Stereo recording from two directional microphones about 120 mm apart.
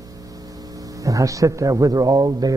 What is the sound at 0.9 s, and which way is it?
A man's voice, 30° right (ahead or behind).